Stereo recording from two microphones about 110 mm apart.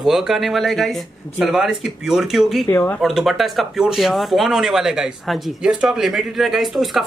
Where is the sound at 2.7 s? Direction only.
25° left (ahead or behind).